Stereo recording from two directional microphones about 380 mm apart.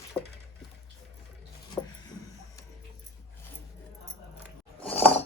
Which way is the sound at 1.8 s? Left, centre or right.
Centre.